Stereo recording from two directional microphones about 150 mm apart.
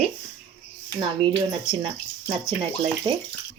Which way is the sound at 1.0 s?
35° right (ahead or behind).